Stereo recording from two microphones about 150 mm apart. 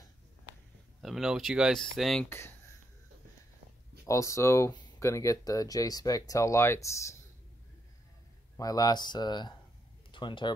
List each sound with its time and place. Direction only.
1.0 s speech: centre (ahead or behind)
2.2 s speech: 15° left (ahead or behind)
4.0 s speech: 20° left (ahead or behind)
8.5 s speech: 25° left (ahead or behind)